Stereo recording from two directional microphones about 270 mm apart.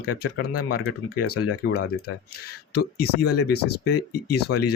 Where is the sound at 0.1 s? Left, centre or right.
Left.